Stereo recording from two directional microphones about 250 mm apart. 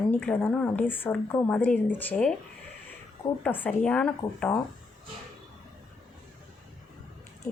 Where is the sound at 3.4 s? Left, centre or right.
Centre.